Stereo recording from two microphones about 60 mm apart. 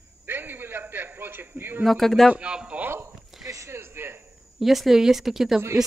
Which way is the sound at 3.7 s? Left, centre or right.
Right.